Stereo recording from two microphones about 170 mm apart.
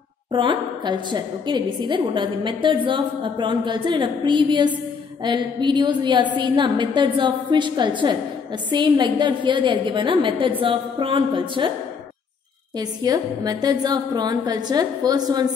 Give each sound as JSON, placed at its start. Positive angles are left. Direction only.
{"t": 0.3, "sound": "a woman's voice", "side_deg": -30}
{"t": 12.7, "sound": "a woman's voice", "side_deg": -25}